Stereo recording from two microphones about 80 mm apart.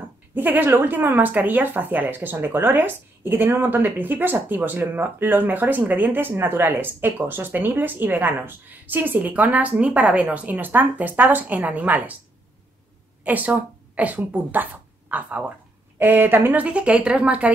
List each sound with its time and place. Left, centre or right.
0.3 s speech: right
13.2 s a woman's voice: right